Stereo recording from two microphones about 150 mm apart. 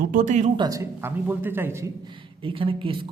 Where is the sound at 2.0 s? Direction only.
35° right (ahead or behind).